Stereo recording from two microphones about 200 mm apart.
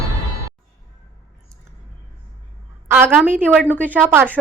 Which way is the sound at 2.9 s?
10° right (ahead or behind).